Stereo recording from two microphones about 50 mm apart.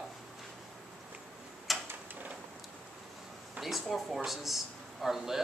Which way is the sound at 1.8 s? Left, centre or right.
Right.